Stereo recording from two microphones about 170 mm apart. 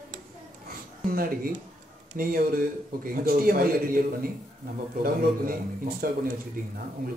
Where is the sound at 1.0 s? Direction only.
60° right (ahead or behind).